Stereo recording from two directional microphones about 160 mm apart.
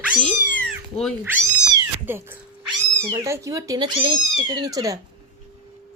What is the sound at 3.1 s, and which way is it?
Speech, 20° right (ahead or behind).